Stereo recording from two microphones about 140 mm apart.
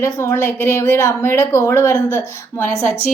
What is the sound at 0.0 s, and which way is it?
A woman's voice, 20° left (ahead or behind).